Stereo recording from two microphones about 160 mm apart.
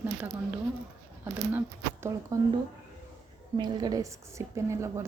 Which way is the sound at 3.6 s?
25° right (ahead or behind).